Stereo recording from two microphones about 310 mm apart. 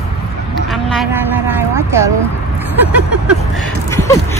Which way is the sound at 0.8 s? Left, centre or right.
Centre.